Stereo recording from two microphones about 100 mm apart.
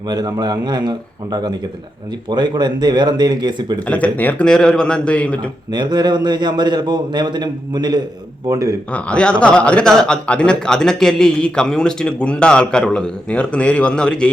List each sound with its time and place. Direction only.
0.1 s a man's voice: 45° right (ahead or behind)
3.8 s a man's voice: 15° left (ahead or behind)
5.7 s a man's voice: 45° right (ahead or behind)
8.9 s a man's voice: 10° left (ahead or behind)